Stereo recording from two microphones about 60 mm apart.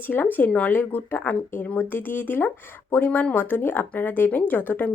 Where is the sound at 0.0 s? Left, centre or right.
Left.